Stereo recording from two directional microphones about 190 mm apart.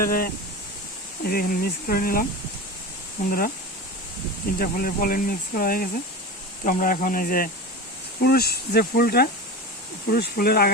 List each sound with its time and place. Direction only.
0.0 s speech: 50° left (ahead or behind)
4.6 s speech: 50° left (ahead or behind)